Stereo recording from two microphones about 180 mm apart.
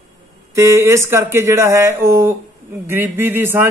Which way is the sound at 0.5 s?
15° right (ahead or behind).